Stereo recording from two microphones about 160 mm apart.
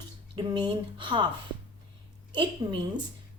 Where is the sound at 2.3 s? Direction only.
30° right (ahead or behind).